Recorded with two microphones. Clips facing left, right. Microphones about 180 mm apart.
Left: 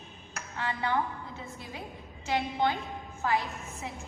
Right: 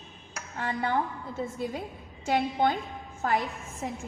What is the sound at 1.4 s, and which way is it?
A woman's voice, 45° right (ahead or behind).